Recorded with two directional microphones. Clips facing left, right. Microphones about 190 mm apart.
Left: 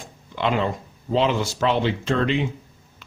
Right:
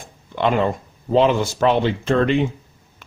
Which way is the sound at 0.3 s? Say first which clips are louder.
Right 4 dB; 50° right (ahead or behind).